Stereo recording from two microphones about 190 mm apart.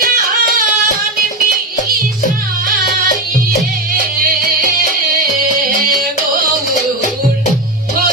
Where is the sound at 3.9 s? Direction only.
50° right (ahead or behind).